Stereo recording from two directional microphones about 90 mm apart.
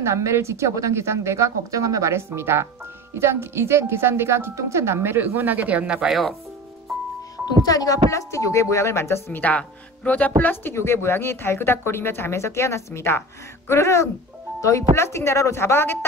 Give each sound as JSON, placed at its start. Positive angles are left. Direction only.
{"t": 0.0, "sound": "a woman's voice", "side_deg": -30}
{"t": 7.6, "sound": "a woman's voice", "side_deg": 40}
{"t": 9.4, "sound": "a woman's voice", "side_deg": 15}